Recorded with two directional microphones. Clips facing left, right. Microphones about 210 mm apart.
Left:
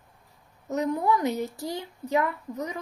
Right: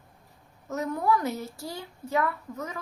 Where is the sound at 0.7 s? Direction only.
20° left (ahead or behind).